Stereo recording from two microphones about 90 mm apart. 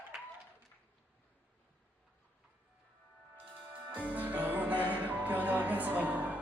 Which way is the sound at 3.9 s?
20° right (ahead or behind).